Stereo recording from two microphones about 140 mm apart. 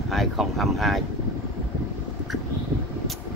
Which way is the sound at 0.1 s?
Centre (ahead or behind).